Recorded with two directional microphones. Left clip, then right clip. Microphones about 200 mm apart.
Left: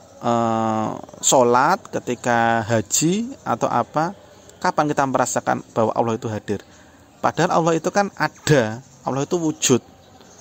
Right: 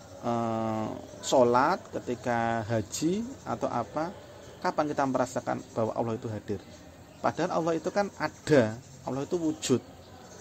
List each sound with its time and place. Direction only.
0.2 s speech: 35° left (ahead or behind)